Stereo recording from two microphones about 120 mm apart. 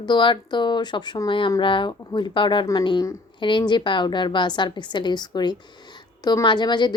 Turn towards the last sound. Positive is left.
turn(degrees=40)  # may be behind; listen again after turning